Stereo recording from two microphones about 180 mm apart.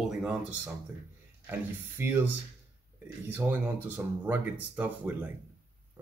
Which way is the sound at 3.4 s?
10° right (ahead or behind).